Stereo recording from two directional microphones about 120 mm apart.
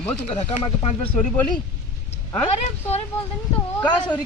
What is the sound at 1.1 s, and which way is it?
Speech, 15° left (ahead or behind).